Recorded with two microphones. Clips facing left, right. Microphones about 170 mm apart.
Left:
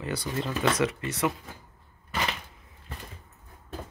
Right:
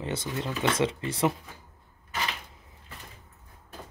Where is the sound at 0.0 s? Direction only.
25° right (ahead or behind).